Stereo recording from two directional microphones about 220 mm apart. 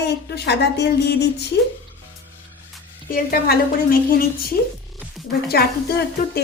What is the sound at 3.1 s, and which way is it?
A woman's voice, 40° left (ahead or behind).